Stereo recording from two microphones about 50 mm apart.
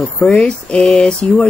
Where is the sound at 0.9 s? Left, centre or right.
Centre.